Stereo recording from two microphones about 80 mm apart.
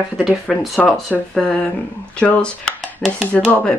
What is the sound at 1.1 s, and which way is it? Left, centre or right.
Speech, centre.